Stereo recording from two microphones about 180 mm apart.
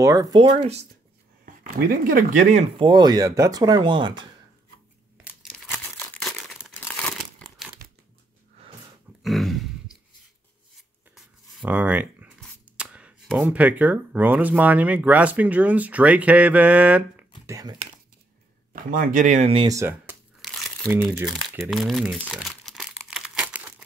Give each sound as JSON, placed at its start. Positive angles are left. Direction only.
{"t": 0.0, "sound": "speech", "side_deg": -20}
{"t": 1.4, "sound": "speech", "side_deg": -50}
{"t": 2.8, "sound": "speech", "side_deg": -25}
{"t": 5.5, "sound": "crumpling", "side_deg": 5}
{"t": 9.2, "sound": "dog", "side_deg": 0}
{"t": 11.1, "sound": "writing", "side_deg": -5}
{"t": 12.7, "sound": "speech", "side_deg": -5}
{"t": 17.5, "sound": "speech", "side_deg": -20}
{"t": 18.7, "sound": "speech", "side_deg": -50}
{"t": 19.7, "sound": "speech", "side_deg": -15}
{"t": 20.4, "sound": "crumpling", "side_deg": 0}
{"t": 20.9, "sound": "speech", "side_deg": 0}
{"t": 21.3, "sound": "crumpling", "side_deg": 0}